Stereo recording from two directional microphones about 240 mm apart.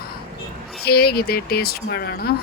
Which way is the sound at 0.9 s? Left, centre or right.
Left.